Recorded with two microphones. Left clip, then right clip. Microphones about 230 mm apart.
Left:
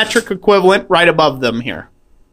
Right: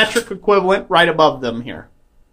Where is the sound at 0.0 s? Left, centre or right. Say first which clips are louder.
Left 3 dB; left.